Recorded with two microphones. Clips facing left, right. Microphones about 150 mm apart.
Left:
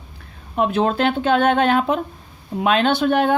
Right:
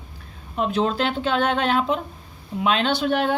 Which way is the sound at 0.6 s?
55° left (ahead or behind).